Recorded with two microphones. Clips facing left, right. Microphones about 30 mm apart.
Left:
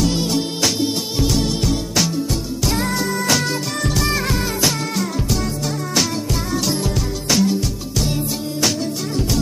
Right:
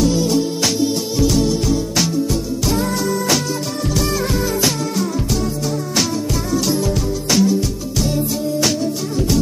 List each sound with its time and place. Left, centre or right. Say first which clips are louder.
0.0 s music: right 3 dB; left
6.9 s music: right 2 dB; centre